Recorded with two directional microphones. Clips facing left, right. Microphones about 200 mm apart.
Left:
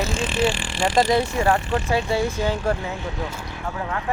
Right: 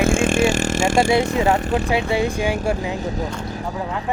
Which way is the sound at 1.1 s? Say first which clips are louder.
Right 2 dB; 15° right (ahead or behind).